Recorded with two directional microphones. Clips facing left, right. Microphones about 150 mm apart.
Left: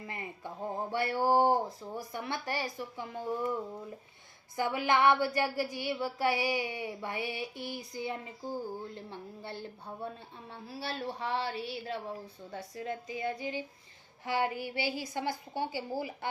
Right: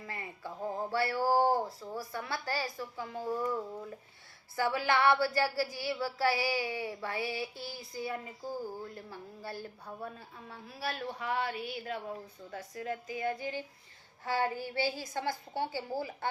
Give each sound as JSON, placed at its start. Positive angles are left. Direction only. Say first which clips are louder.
{"t": 0.1, "sound": "male singing", "louder": "right 1 dB", "side_deg": 20}
{"t": 4.5, "sound": "a sound", "louder": "left 1 dB", "side_deg": 20}
{"t": 14.3, "sound": "a woman's voice", "louder": "even", "side_deg": 15}